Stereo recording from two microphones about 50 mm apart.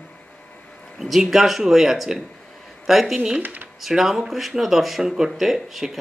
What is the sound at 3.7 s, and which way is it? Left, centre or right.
Speech, centre.